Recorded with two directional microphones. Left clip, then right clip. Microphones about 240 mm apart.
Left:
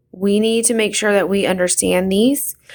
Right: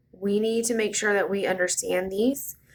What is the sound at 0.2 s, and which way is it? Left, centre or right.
Speech, left.